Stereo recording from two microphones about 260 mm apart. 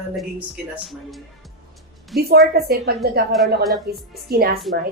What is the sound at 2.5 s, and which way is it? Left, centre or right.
Speech, right.